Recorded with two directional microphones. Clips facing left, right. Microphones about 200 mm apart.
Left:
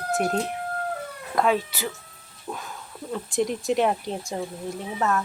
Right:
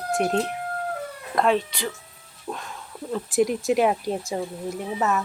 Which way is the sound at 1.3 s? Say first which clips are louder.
Right 1 dB; 5° left (ahead or behind).